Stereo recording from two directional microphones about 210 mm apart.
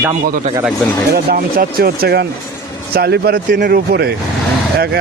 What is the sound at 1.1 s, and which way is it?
Speech, 45° right (ahead or behind).